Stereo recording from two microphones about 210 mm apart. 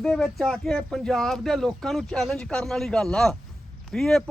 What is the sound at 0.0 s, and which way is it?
Speech, centre (ahead or behind).